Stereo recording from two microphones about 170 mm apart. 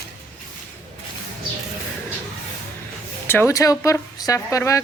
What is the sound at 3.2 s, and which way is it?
Speech, 15° left (ahead or behind).